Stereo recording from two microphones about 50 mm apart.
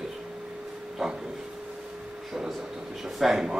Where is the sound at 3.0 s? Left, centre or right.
Centre.